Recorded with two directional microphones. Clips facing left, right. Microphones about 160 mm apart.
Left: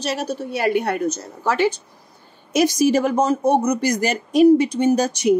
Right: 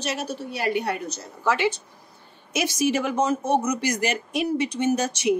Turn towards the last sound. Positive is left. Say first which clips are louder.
# left 5 dB
turn(degrees=35)  # may be behind; listen again after turning